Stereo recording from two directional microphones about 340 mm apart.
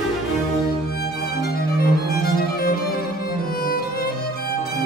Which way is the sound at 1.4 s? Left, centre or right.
Left.